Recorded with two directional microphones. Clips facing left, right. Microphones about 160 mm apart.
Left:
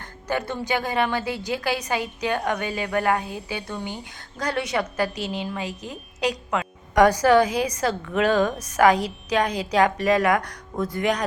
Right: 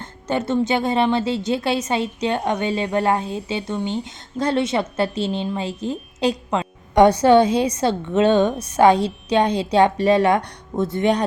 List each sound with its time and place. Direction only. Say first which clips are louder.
0.0 s a woman's voice: right 4 dB; 25° right (ahead or behind)